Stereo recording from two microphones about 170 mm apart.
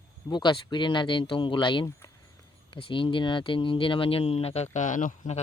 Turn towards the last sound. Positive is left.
turn(degrees=45)  # may be behind; listen again after turning